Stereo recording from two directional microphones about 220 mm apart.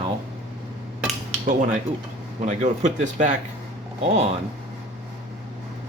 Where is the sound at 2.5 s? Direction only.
35° right (ahead or behind).